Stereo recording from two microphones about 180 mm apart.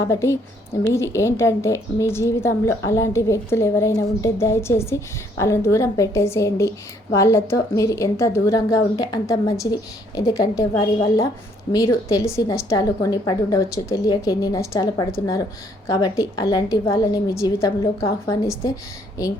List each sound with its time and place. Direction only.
0.1 s a woman's voice: 15° left (ahead or behind)